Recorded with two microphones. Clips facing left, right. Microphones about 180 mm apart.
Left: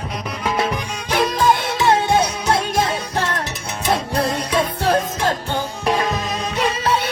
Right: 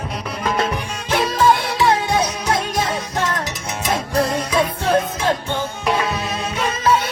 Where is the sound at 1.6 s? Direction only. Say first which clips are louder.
Left 1 dB; 25° left (ahead or behind).